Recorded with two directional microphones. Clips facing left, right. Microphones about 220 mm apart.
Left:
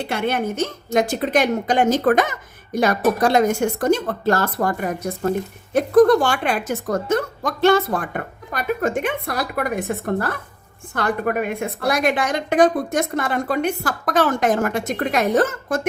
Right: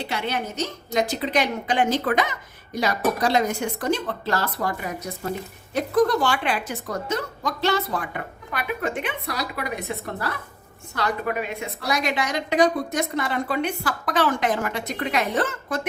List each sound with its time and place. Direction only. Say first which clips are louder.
0.0 s speech: left 6 dB; 50° left (ahead or behind)